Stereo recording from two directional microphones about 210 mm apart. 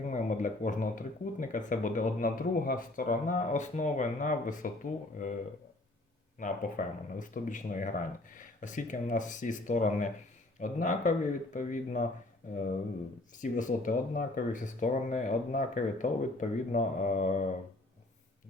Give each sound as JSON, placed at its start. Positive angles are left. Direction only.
{"t": 0.1, "sound": "speech", "side_deg": 35}
{"t": 6.4, "sound": "speech", "side_deg": 40}
{"t": 13.4, "sound": "speech", "side_deg": 40}